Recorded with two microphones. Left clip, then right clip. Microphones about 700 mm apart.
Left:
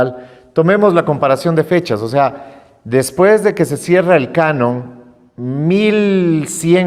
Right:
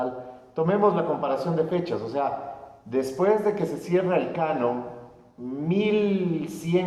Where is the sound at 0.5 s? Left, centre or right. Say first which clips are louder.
Left 11 dB; left.